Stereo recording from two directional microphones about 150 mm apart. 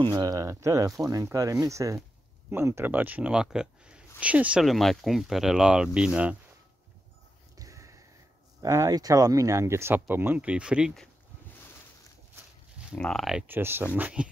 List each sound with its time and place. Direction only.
0.0 s speech: 25° right (ahead or behind); by 6.3 s 5° right (ahead or behind)
7.5 s a sound: 20° right (ahead or behind)
8.5 s speech: 20° right (ahead or behind); by 11.1 s 5° right (ahead or behind)
12.9 s speech: 5° left (ahead or behind)
13.5 s speech: 15° right (ahead or behind)